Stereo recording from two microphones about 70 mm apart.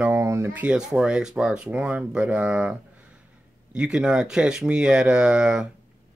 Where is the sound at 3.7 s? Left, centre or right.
Centre.